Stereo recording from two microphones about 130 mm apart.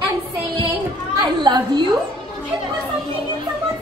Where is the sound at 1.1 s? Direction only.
35° right (ahead or behind).